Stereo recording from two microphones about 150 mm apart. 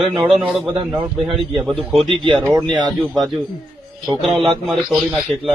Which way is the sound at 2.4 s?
15° right (ahead or behind).